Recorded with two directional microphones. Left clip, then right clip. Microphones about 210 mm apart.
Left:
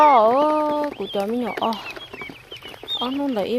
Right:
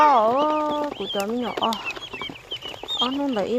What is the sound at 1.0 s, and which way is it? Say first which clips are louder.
Speech: left 2 dB; centre (ahead or behind).